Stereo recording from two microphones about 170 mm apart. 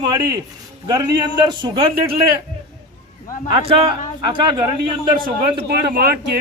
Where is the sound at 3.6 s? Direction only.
35° right (ahead or behind).